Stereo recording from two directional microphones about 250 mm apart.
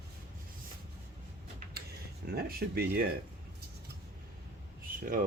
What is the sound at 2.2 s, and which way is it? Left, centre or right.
Speech, right.